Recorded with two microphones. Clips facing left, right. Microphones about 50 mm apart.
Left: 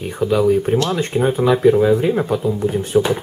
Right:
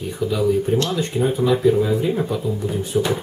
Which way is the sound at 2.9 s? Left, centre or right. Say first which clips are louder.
Left 5 dB; left.